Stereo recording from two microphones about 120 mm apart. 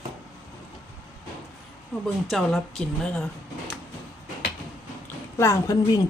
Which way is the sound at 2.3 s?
5° left (ahead or behind).